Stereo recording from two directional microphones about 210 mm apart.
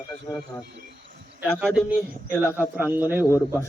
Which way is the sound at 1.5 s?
Centre (ahead or behind).